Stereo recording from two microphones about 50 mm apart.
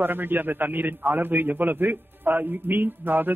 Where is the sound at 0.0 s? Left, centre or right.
Right.